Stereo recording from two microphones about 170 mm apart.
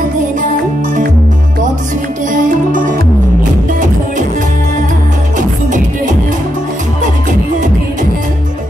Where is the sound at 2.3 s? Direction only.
50° right (ahead or behind).